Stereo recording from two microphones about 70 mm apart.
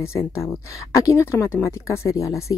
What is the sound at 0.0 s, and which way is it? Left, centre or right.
Speech, left.